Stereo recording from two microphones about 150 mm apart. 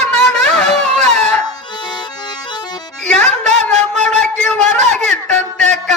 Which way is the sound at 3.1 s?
5° left (ahead or behind).